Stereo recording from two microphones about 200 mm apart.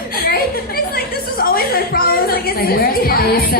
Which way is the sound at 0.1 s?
50° left (ahead or behind).